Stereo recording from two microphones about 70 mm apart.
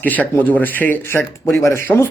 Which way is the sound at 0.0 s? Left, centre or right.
Left.